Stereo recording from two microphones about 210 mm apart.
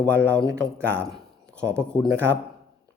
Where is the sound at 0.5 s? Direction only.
5° left (ahead or behind).